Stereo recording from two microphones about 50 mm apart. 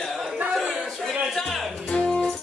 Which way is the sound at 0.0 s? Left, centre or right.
Centre.